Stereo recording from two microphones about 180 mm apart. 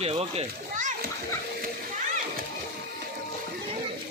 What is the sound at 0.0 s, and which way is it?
Speech, 35° right (ahead or behind).